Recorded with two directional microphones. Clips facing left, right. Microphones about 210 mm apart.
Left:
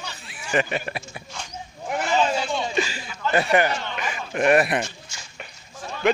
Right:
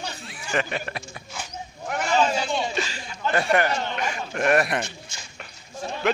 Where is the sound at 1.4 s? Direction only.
5° right (ahead or behind).